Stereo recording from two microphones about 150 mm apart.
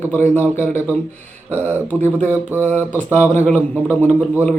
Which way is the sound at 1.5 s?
50° right (ahead or behind).